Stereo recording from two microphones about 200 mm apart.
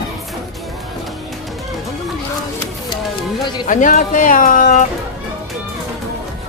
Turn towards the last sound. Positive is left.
turn(degrees=40)  # may be behind; listen again after turning